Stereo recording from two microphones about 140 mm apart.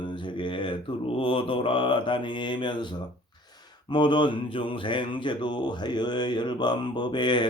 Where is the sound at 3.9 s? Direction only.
35° left (ahead or behind).